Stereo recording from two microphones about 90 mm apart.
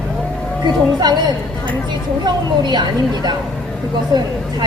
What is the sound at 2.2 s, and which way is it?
Speech, 55° right (ahead or behind).